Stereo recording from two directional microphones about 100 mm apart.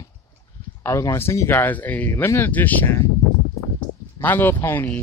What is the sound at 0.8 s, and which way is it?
Speech, 30° left (ahead or behind).